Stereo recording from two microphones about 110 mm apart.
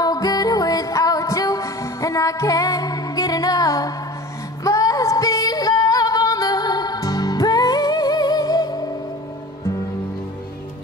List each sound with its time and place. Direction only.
0.0 s music: 35° left (ahead or behind)